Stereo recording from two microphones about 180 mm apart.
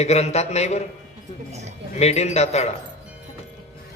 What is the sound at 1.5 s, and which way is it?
Speech, 40° right (ahead or behind).